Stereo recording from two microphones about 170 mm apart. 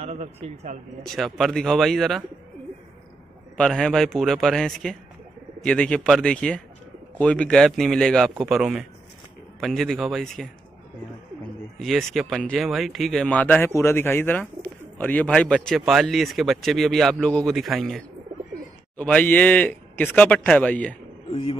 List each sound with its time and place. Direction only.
0.0 s speech: 40° right (ahead or behind)
1.0 s speech: centre (ahead or behind)
3.5 s speech: 5° left (ahead or behind)
11.8 s speech: centre (ahead or behind)
21.3 s a man's voice: 30° left (ahead or behind)